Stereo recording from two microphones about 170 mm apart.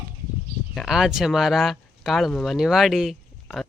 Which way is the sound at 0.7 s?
Centre (ahead or behind).